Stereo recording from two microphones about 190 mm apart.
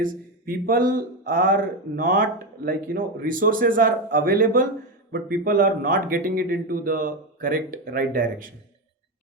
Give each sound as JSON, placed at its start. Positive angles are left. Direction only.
{"t": 0.0, "sound": "a man's voice", "side_deg": -50}